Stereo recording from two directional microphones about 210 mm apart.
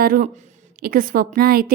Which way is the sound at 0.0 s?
40° right (ahead or behind).